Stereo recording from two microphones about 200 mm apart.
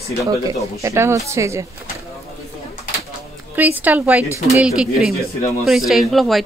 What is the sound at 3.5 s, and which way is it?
Speech, 10° right (ahead or behind).